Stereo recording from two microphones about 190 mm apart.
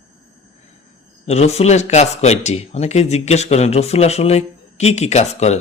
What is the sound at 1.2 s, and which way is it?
A man's voice, 35° left (ahead or behind).